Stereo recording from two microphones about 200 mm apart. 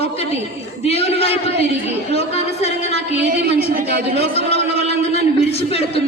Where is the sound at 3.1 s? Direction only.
55° right (ahead or behind).